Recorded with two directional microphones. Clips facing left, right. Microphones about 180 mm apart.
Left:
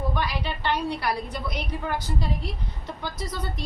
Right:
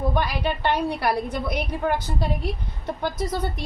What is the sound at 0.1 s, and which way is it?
A woman's voice, 50° right (ahead or behind).